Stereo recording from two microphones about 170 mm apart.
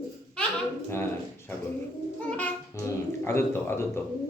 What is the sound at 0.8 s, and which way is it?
Speech, 15° left (ahead or behind).